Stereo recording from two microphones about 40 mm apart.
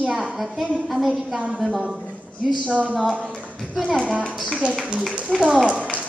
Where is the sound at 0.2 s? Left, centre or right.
Centre.